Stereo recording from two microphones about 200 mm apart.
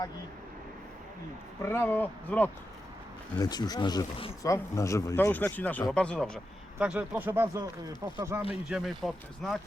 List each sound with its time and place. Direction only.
1.6 s speech: 10° left (ahead or behind)
3.3 s speech: 20° left (ahead or behind); by 8.4 s 15° right (ahead or behind)
8.6 s speech: centre (ahead or behind)